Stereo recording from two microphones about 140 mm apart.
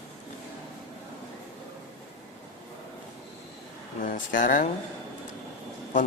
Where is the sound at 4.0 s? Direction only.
75° left (ahead or behind).